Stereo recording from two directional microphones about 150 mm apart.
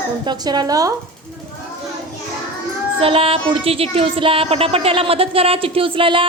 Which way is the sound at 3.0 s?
40° right (ahead or behind).